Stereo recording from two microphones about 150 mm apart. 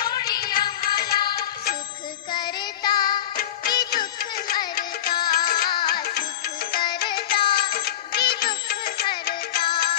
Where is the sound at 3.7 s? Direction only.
30° left (ahead or behind).